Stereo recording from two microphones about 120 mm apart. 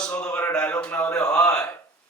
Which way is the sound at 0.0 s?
10° left (ahead or behind).